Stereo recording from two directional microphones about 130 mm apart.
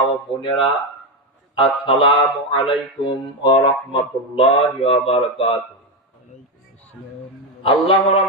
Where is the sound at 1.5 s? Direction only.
40° left (ahead or behind).